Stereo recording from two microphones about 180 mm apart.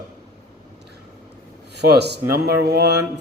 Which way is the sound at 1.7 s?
65° right (ahead or behind).